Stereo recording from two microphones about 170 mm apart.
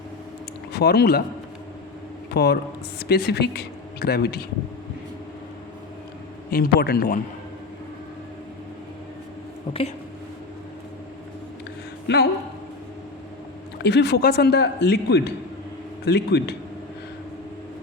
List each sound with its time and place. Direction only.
0.7 s speech: 70° left (ahead or behind)
2.3 s speech: 75° left (ahead or behind)
6.5 s a man's voice: 65° left (ahead or behind)
9.7 s speech: 30° left (ahead or behind)
12.0 s speech: 75° left (ahead or behind)
13.8 s speech: 80° left